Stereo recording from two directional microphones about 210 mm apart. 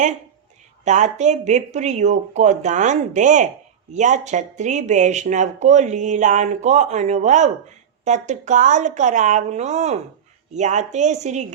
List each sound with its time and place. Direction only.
0.9 s speech: 35° right (ahead or behind)